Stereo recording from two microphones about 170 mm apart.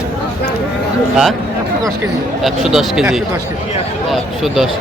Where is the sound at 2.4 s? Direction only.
Centre (ahead or behind).